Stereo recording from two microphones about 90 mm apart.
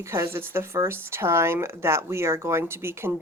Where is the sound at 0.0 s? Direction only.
30° right (ahead or behind).